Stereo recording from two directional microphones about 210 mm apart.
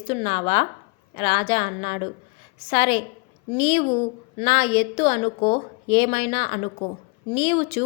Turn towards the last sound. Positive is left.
turn(degrees=25)  # may be behind; listen again after turning